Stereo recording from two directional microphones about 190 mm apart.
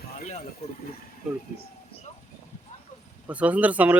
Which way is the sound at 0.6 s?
30° left (ahead or behind).